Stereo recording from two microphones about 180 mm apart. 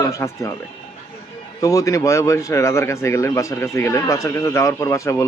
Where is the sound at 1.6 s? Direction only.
20° left (ahead or behind).